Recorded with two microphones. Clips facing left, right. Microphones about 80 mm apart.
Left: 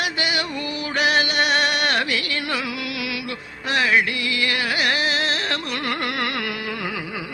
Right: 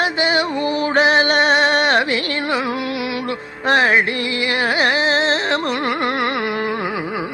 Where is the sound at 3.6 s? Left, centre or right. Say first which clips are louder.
Right 5 dB; right.